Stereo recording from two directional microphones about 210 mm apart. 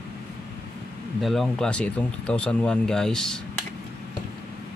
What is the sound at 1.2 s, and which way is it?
Speech, centre (ahead or behind).